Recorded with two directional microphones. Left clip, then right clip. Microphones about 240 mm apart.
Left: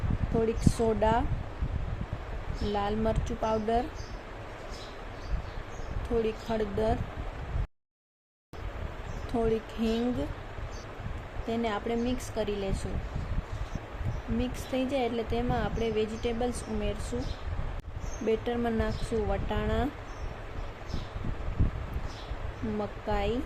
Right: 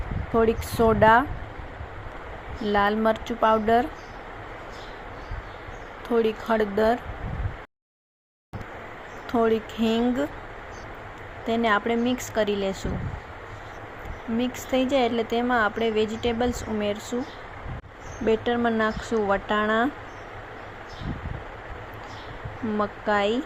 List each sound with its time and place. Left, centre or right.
0.4 s speech: centre
2.7 s speech: centre
6.2 s speech: centre
9.3 s speech: centre
11.4 s speech: centre
14.3 s speech: centre
18.3 s speech: centre
22.8 s speech: centre